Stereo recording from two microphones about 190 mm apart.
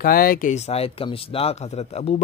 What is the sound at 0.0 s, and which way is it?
Speech, 50° left (ahead or behind).